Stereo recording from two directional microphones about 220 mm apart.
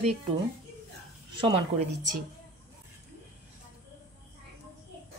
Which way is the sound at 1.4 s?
25° right (ahead or behind).